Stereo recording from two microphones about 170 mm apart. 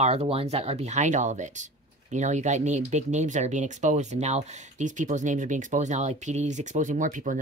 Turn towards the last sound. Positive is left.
turn(degrees=-50)  # may be behind; listen again after turning